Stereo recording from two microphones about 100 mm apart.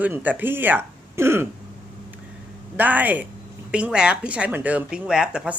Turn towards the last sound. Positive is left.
turn(degrees=-10)  # may be behind; listen again after turning